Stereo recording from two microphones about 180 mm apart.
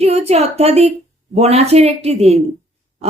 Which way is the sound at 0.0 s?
35° right (ahead or behind).